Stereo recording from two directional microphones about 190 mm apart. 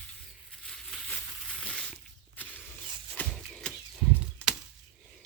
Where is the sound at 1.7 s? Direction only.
5° left (ahead or behind).